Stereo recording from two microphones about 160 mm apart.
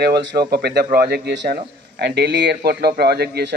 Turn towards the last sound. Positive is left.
turn(degrees=-85)